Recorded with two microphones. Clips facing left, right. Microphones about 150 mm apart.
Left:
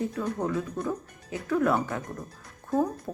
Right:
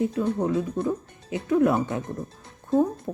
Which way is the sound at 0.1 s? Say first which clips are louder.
Right 5 dB; 25° right (ahead or behind).